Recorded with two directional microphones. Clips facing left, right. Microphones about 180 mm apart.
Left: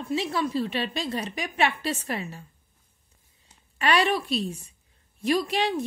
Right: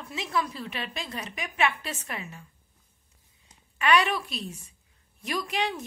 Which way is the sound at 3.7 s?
30° left (ahead or behind).